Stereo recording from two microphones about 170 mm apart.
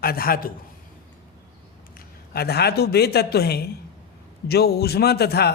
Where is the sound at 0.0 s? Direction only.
60° left (ahead or behind).